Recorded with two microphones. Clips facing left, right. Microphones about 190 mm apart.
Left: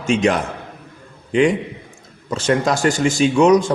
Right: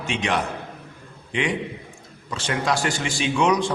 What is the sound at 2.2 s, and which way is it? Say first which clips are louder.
A man's voice: left 7 dB; 45° left (ahead or behind).